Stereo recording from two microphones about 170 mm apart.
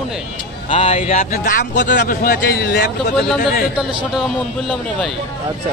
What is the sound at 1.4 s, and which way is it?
A man's voice, 55° left (ahead or behind).